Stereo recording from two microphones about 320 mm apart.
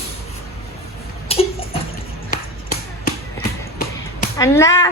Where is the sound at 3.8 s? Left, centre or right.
Left.